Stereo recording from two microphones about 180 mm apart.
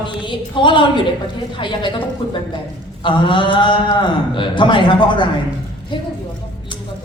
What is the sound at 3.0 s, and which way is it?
A man's voice, 25° left (ahead or behind).